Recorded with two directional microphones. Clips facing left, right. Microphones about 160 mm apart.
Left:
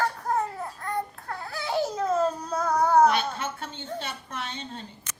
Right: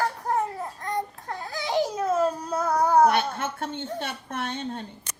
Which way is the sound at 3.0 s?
55° right (ahead or behind).